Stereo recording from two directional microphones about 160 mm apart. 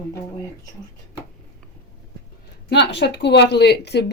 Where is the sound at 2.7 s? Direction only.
90° left.